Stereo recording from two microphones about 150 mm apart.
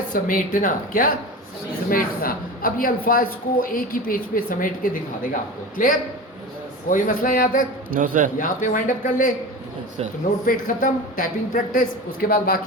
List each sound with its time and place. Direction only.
0.1 s a woman's voice: 65° left (ahead or behind)
7.9 s a man's voice: 65° right (ahead or behind)
8.4 s a woman's voice: 65° left (ahead or behind)
10.4 s a woman's voice: 60° left (ahead or behind)